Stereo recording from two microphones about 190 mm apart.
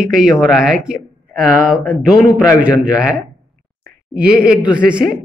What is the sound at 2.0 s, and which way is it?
A man's voice, 5° right (ahead or behind).